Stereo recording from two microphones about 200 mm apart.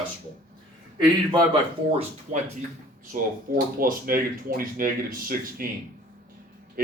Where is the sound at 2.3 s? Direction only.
40° right (ahead or behind).